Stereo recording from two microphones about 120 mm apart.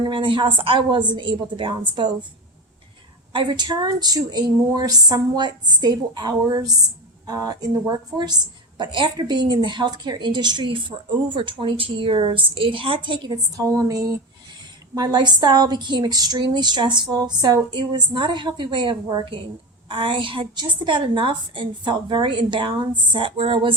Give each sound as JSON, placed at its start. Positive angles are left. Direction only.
{"t": 0.0, "sound": "a woman's voice", "side_deg": -45}
{"t": 3.3, "sound": "a woman's voice", "side_deg": -40}